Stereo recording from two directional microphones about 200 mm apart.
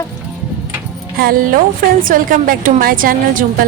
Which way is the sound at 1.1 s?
45° right (ahead or behind).